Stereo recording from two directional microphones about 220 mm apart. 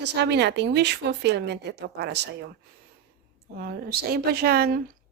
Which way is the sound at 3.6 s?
45° right (ahead or behind).